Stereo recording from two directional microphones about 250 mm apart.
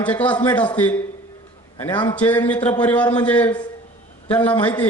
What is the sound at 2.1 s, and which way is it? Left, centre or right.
A man's voice, centre.